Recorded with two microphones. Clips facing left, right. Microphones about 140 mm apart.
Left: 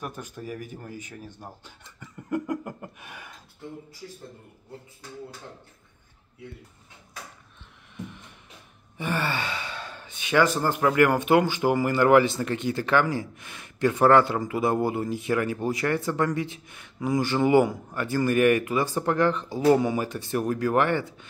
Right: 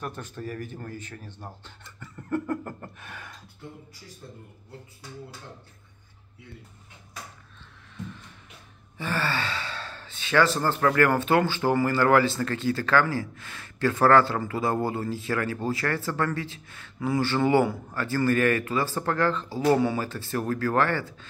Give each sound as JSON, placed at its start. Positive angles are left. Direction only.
{"t": 0.0, "sound": "speech", "side_deg": 10}
{"t": 2.0, "sound": "a sound", "side_deg": 15}
{"t": 8.9, "sound": "speech", "side_deg": 20}